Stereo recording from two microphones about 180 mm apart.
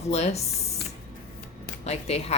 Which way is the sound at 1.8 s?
35° left (ahead or behind).